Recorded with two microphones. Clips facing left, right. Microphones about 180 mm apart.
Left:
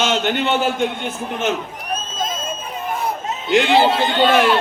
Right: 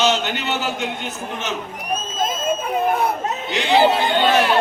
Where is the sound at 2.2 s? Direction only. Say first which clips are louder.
Right 5 dB; 55° right (ahead or behind).